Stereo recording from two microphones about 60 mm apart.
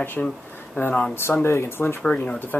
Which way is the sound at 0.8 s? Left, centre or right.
Left.